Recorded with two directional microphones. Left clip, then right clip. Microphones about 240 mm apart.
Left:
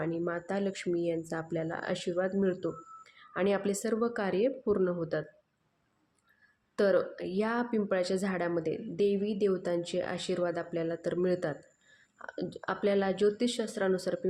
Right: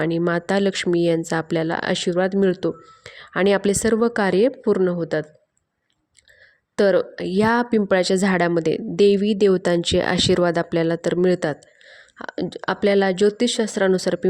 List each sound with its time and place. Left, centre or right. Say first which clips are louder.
0.0 s speech: right 12 dB; right
6.7 s speech: right 9 dB; right